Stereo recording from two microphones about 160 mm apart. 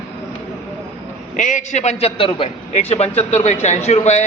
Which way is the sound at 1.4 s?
50° left (ahead or behind).